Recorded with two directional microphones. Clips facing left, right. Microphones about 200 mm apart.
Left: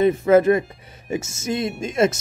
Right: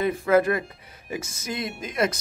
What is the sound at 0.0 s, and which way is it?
Speech, 25° left (ahead or behind).